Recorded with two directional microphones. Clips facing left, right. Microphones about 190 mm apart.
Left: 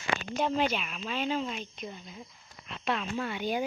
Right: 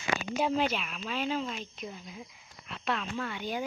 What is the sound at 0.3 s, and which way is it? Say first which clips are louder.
Speech: even; 5° right (ahead or behind).